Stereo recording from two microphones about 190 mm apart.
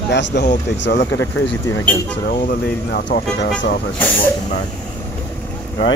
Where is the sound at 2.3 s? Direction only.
50° left (ahead or behind).